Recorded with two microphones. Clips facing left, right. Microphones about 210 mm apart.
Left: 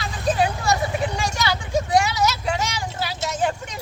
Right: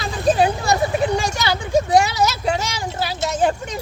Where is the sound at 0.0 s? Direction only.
25° right (ahead or behind).